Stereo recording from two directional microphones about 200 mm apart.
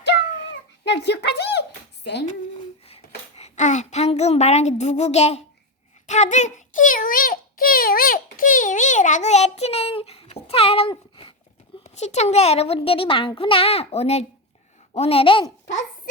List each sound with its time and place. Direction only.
0.9 s speech: 55° left (ahead or behind)
3.3 s a woman's voice: 35° left (ahead or behind)
6.1 s a sound: 35° left (ahead or behind)
11.8 s a woman's voice: 35° left (ahead or behind)